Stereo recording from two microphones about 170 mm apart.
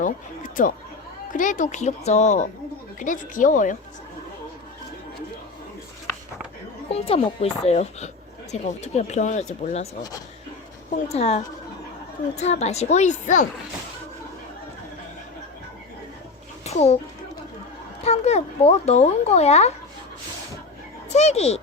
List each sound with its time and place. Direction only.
0.0 s speech: 50° left (ahead or behind)
6.8 s speech: 35° left (ahead or behind)
11.1 s speech: 40° left (ahead or behind)
16.6 s a child's voice: 40° left (ahead or behind)
18.0 s speech: 40° left (ahead or behind)
21.1 s speech: 40° left (ahead or behind)